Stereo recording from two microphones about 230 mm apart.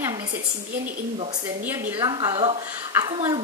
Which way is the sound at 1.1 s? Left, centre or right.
Right.